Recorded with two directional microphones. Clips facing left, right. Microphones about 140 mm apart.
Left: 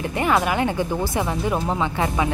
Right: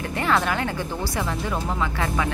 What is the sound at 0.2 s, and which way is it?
Speech, 15° left (ahead or behind).